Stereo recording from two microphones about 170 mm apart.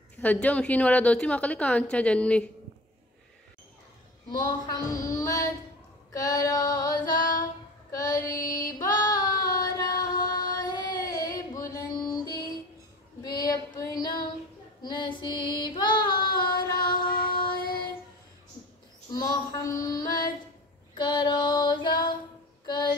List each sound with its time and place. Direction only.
0.2 s a woman's voice: 10° left (ahead or behind)
4.5 s music: 25° left (ahead or behind)
7.9 s female singing: 20° left (ahead or behind)
10.3 s a sound: 25° left (ahead or behind)
13.2 s female singing: 20° left (ahead or behind)
14.8 s child singing: 25° left (ahead or behind)
16.3 s music: 25° left (ahead or behind)
16.7 s music: 55° left (ahead or behind)
17.6 s child singing: 55° left (ahead or behind)
19.1 s mantra: 20° left (ahead or behind)
20.9 s child singing: 25° left (ahead or behind)
22.7 s music: 25° left (ahead or behind)